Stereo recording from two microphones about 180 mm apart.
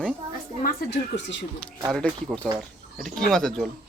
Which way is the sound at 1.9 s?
5° left (ahead or behind).